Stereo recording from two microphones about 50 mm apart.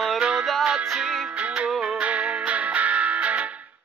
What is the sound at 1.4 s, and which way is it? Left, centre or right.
Music, right.